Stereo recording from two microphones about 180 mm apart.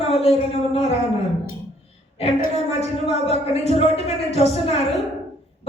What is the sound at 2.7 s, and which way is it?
Speech, 35° left (ahead or behind).